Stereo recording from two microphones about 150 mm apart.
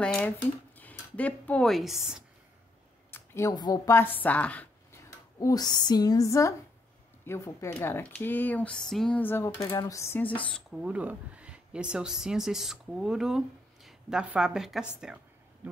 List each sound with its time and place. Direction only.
0.0 s speech: 5° left (ahead or behind)
3.1 s speech: 20° left (ahead or behind)
5.4 s speech: 25° left (ahead or behind); by 10.6 s 10° left (ahead or behind)
10.7 s a woman's voice: 10° right (ahead or behind)